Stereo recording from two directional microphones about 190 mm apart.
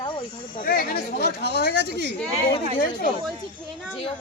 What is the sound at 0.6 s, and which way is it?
Speech, 50° left (ahead or behind).